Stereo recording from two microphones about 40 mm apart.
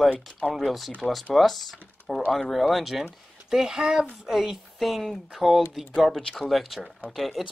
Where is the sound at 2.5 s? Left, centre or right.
Centre.